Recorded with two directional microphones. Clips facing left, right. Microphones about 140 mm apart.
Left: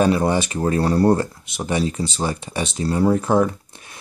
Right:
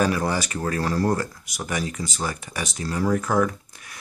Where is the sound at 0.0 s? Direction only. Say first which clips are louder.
Left 5 dB; 25° left (ahead or behind).